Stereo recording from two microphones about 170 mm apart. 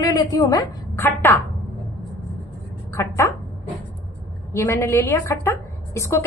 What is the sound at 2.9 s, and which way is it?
Speech, 15° left (ahead or behind).